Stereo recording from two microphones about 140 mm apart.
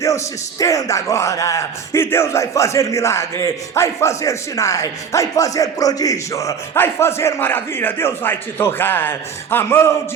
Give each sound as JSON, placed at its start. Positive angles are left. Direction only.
{"t": 0.6, "sound": "speech", "side_deg": 25}